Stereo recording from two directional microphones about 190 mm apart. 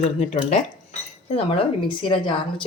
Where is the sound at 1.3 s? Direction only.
30° left (ahead or behind).